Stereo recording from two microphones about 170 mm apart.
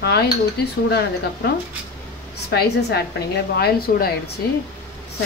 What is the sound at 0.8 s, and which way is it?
Speech, 75° left (ahead or behind).